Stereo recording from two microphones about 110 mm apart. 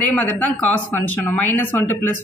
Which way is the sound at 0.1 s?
15° left (ahead or behind).